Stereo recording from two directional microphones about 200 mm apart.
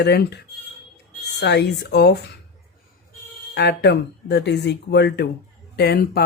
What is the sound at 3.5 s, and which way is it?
A man's voice, 55° left (ahead or behind).